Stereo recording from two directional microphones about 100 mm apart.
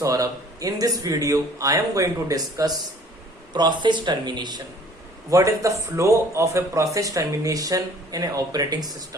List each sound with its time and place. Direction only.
0.0 s speech: 35° right (ahead or behind)
3.5 s speech: 45° right (ahead or behind)
5.3 s speech: 35° right (ahead or behind)